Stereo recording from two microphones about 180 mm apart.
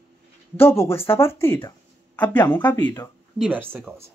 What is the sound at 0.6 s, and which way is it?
Speech, 15° left (ahead or behind).